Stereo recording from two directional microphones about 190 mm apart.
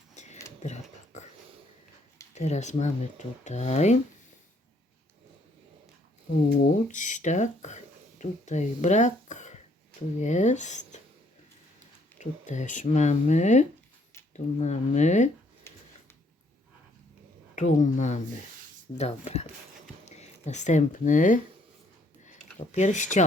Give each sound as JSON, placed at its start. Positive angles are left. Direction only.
{"t": 0.6, "sound": "a sound", "side_deg": 35}
{"t": 2.3, "sound": "speech", "side_deg": 35}
{"t": 6.8, "sound": "speech", "side_deg": 40}
{"t": 12.2, "sound": "speech", "side_deg": 40}
{"t": 15.7, "sound": "a sound", "side_deg": 10}
{"t": 17.5, "sound": "speech", "side_deg": 40}